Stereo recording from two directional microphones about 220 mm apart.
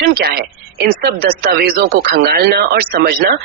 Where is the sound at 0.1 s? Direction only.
45° right (ahead or behind).